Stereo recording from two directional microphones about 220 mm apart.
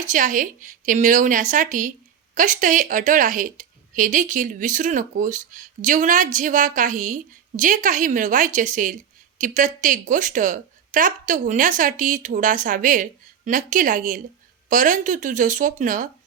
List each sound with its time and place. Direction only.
0.0 s a woman's voice: 35° right (ahead or behind)